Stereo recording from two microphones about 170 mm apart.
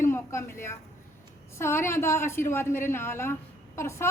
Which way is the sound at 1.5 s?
15° left (ahead or behind).